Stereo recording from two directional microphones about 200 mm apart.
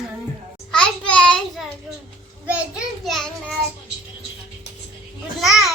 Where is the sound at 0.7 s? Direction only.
5° left (ahead or behind).